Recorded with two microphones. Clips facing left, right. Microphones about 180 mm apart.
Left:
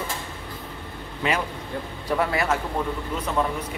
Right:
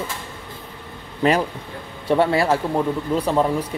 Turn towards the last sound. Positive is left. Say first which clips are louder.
# right 6 dB
turn(degrees=-35)  # may be behind; listen again after turning